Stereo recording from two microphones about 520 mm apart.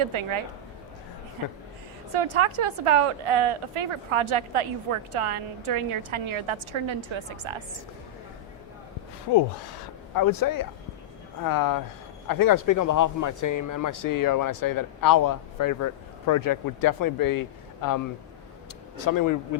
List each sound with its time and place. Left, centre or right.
0.0 s a woman's voice: right
2.1 s a woman's voice: right
10.2 s a man's voice: left
19.0 s a man's voice: left